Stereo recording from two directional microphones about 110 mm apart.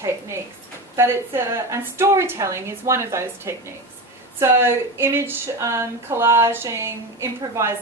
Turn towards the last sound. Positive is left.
turn(degrees=-25)  # may be behind; listen again after turning